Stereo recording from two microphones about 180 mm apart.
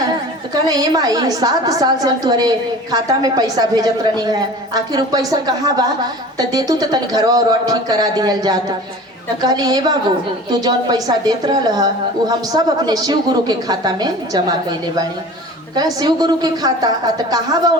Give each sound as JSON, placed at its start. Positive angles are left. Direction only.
{"t": 0.5, "sound": "a woman's voice", "side_deg": -20}